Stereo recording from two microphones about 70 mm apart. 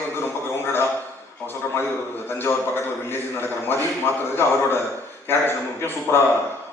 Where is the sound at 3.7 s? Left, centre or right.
Left.